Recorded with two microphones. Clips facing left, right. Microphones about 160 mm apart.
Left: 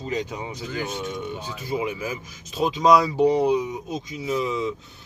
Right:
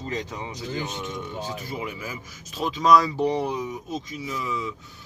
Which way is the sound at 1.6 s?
20° left (ahead or behind).